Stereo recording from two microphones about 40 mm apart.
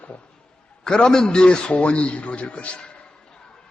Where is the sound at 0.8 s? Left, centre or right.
Centre.